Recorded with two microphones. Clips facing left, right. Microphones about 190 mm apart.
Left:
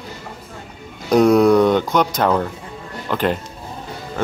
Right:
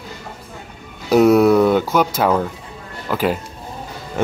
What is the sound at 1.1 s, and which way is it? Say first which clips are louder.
Music: right 1 dB; 5° right (ahead or behind).